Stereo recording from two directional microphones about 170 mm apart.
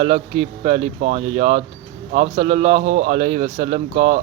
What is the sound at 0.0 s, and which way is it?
A man's voice, 35° right (ahead or behind).